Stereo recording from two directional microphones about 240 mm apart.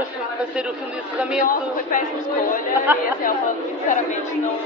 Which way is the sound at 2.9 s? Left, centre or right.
Centre.